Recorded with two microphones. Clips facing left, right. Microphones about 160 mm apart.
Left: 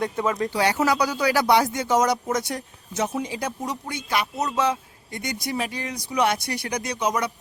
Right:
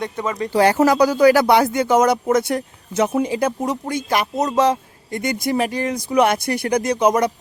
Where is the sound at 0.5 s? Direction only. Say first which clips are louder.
Right 10 dB; 45° right (ahead or behind).